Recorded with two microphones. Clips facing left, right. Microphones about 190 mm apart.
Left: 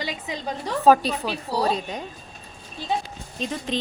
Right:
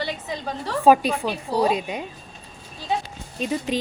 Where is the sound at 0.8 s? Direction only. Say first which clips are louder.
Right 1 dB; 10° right (ahead or behind).